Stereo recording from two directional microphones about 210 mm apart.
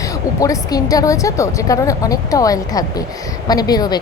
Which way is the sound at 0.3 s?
15° left (ahead or behind).